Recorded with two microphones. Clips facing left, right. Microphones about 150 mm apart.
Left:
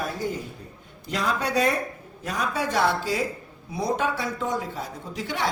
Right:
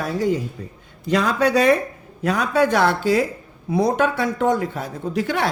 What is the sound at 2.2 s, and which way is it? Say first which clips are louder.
A man's voice: right 9 dB; 70° right (ahead or behind).